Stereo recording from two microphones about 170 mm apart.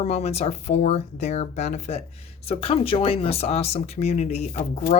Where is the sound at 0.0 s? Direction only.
40° left (ahead or behind).